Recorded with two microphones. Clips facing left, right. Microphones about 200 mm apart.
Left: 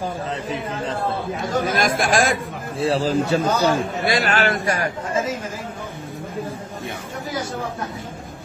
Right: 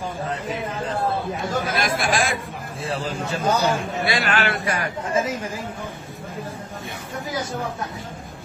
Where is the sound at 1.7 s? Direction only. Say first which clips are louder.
Left 4 dB; 45° left (ahead or behind).